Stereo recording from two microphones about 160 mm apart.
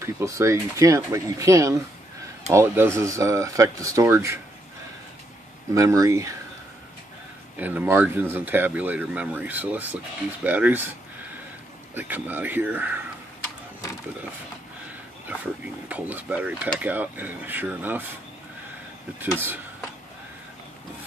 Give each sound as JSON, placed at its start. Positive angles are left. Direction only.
{"t": 0.0, "sound": "speech", "side_deg": -20}
{"t": 5.7, "sound": "speech", "side_deg": -20}
{"t": 7.5, "sound": "speech", "side_deg": -10}
{"t": 11.9, "sound": "speech", "side_deg": -10}
{"t": 15.2, "sound": "speech", "side_deg": -10}